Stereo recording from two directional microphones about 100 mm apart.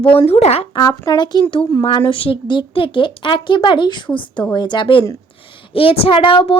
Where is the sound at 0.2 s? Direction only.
90° left.